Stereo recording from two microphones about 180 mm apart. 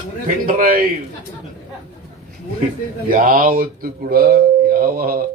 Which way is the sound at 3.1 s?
50° right (ahead or behind).